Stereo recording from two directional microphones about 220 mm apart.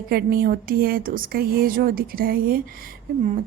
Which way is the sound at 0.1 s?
45° right (ahead or behind).